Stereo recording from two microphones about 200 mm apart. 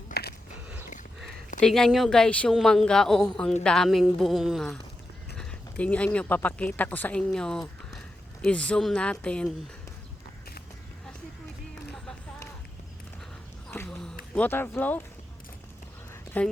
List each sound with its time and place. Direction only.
0.1 s biting: 50° left (ahead or behind)
1.5 s speech: 5° left (ahead or behind)
13.7 s a sound: 5° left (ahead or behind)
14.3 s speech: 10° left (ahead or behind)
16.4 s speech: 10° left (ahead or behind)